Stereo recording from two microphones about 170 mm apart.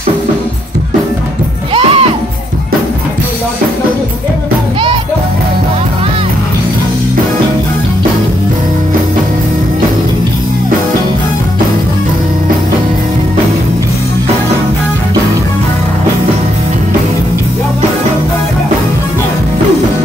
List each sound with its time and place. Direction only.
1.7 s music: 35° right (ahead or behind)